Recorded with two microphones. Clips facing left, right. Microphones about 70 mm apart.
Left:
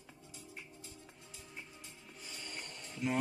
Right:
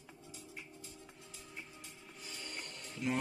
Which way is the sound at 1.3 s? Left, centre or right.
Centre.